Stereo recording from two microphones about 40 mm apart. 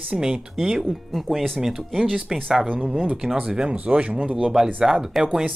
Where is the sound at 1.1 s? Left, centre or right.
Centre.